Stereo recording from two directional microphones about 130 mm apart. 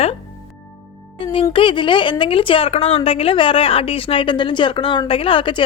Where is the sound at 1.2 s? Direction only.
40° left (ahead or behind).